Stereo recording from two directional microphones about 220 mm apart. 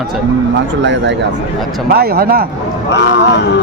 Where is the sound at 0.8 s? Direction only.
55° right (ahead or behind).